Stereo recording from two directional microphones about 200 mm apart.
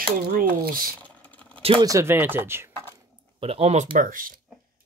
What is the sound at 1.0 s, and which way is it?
Computer keyboard, 5° left (ahead or behind).